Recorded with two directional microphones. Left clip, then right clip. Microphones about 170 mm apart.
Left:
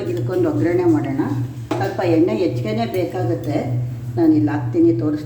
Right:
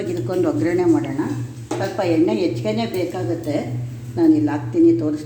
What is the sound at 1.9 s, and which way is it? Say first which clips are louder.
Speech: left 1 dB; 40° right (ahead or behind).